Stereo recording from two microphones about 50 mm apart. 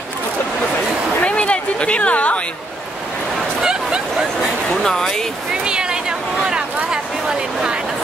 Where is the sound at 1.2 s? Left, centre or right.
Left.